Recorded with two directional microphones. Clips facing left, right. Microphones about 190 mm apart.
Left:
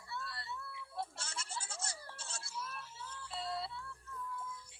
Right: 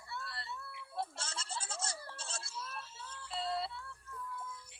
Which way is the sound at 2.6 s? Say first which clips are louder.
Even; 70° right (ahead or behind).